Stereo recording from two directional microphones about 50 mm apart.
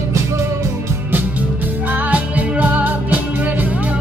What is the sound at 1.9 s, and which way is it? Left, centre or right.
Music, right.